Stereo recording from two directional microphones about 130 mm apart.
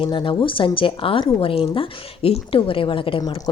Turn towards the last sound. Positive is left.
turn(degrees=35)  # may be behind; listen again after turning